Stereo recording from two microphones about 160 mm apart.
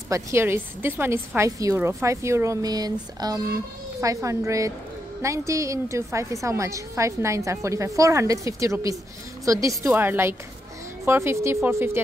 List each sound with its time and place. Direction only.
0.1 s a woman's voice: 15° right (ahead or behind)